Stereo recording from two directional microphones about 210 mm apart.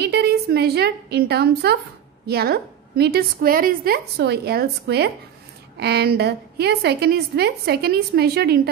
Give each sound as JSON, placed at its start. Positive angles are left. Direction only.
{"t": 0.0, "sound": "a woman's voice", "side_deg": -50}